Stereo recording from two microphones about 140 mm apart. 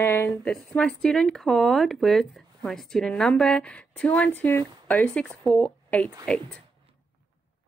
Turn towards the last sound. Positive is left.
turn(degrees=10)  # may be behind; listen again after turning